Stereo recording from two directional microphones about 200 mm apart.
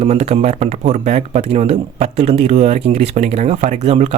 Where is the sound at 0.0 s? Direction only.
30° right (ahead or behind).